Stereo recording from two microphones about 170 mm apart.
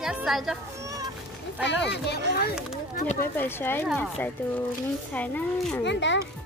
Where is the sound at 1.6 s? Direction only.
90° left.